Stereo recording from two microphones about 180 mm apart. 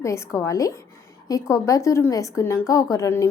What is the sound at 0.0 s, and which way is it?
A woman's voice, 15° left (ahead or behind).